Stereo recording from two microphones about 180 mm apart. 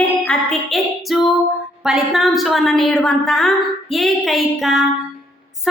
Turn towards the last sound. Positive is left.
turn(degrees=0)  # may be behind; listen again after turning